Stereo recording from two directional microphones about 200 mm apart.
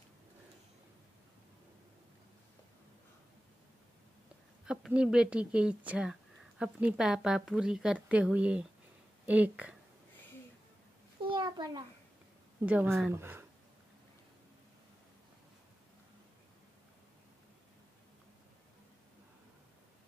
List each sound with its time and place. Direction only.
4.6 s a woman's voice: 5° right (ahead or behind)
11.2 s a sound: 20° right (ahead or behind)
12.6 s speech: 10° right (ahead or behind)